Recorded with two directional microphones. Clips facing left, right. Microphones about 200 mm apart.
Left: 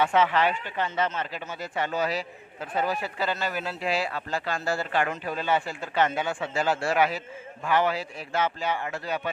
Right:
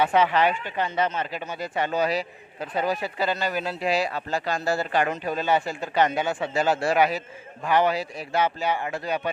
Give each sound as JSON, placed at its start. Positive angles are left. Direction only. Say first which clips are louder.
{"t": 0.0, "sound": "a man's voice", "louder": "right 2 dB", "side_deg": -15}
{"t": 5.5, "sound": "speech", "louder": "right 3 dB", "side_deg": -40}
{"t": 5.9, "sound": "speech", "louder": "right 2 dB", "side_deg": -15}